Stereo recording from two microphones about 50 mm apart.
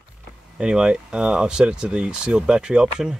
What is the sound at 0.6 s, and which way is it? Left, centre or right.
Speech, centre.